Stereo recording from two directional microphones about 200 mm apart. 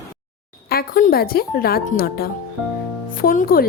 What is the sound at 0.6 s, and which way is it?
Speech, 50° left (ahead or behind).